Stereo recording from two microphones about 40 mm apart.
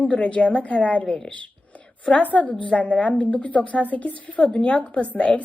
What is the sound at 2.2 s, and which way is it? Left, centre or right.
A woman's voice, left.